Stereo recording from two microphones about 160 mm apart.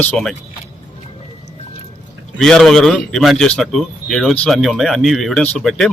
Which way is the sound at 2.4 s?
5° left (ahead or behind).